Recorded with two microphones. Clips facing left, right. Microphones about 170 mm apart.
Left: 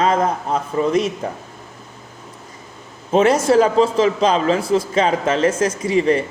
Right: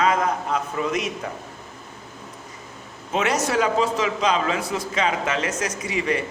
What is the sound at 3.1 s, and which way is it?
A man's voice, 30° left (ahead or behind).